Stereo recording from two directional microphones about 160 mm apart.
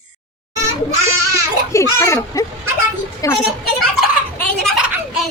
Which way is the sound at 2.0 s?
15° left (ahead or behind).